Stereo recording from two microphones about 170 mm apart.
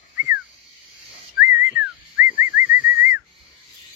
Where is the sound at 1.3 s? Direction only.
10° right (ahead or behind).